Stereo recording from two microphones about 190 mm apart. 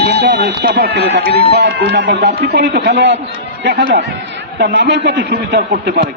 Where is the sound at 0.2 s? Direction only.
60° right (ahead or behind).